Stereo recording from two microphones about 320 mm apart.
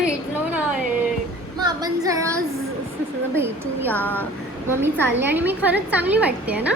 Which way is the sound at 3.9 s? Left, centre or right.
Centre.